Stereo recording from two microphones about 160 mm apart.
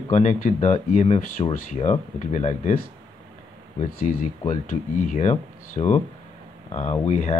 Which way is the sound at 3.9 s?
65° left (ahead or behind).